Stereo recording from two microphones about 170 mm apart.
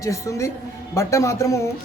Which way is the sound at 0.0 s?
20° left (ahead or behind).